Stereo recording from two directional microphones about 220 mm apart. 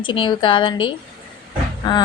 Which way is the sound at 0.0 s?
20° left (ahead or behind).